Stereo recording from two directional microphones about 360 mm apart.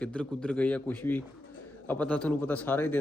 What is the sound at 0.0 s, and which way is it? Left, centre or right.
Speech, centre.